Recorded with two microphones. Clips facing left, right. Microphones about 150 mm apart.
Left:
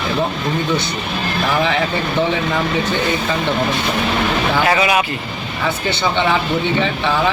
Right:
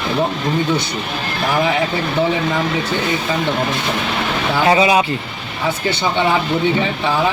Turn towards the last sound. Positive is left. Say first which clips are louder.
# even
turn(degrees=-10)  # may be behind; listen again after turning